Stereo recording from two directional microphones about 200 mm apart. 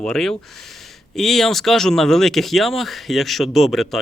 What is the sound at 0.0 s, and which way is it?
Speech, centre (ahead or behind).